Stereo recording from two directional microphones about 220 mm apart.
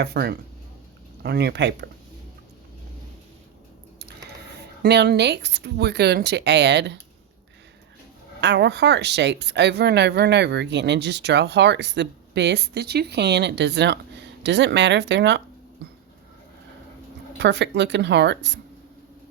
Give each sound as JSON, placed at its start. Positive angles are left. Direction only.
{"t": 0.0, "sound": "speech", "side_deg": -45}
{"t": 4.8, "sound": "speech", "side_deg": -50}
{"t": 8.4, "sound": "speech", "side_deg": -50}
{"t": 17.3, "sound": "speech", "side_deg": -50}